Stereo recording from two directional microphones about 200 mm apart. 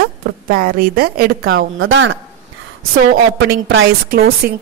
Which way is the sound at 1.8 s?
75° right (ahead or behind).